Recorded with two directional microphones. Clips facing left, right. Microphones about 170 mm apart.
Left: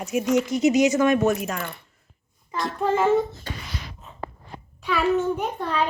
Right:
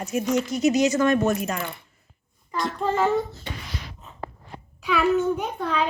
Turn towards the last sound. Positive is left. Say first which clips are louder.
# even
turn(degrees=0)  # may be behind; listen again after turning